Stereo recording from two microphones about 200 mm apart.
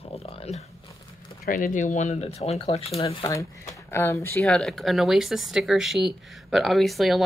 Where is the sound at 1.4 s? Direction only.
45° left (ahead or behind); by 3.3 s 30° left (ahead or behind).